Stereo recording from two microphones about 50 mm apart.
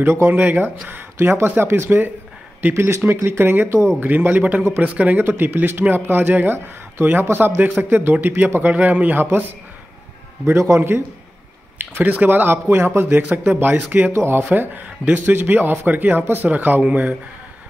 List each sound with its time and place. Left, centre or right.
0.0 s speech: right
0.3 s speech: right
1.1 s speech: right
3.3 s speech: right
4.3 s a man's voice: right
5.4 s a man's voice: right
10.4 s a man's voice: right
11.8 s a man's voice: right
12.3 s a man's voice: right